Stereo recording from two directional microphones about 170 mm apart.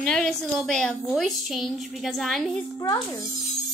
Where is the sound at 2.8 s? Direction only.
20° left (ahead or behind).